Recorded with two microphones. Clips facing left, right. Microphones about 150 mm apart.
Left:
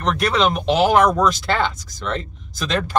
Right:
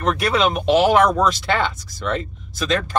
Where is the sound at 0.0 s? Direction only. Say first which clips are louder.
Even; 5° right (ahead or behind).